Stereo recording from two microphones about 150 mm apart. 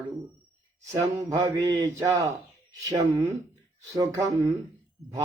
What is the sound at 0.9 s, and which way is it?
Mantra, 20° right (ahead or behind).